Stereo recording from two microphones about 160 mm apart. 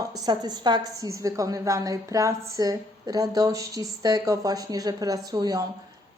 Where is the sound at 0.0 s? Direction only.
25° right (ahead or behind).